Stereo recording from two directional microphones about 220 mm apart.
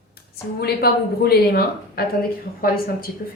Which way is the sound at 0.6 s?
45° left (ahead or behind).